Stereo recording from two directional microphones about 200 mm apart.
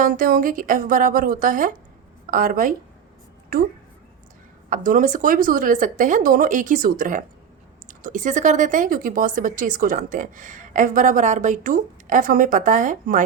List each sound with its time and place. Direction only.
0.0 s a woman's voice: 45° right (ahead or behind)
4.7 s speech: 40° right (ahead or behind)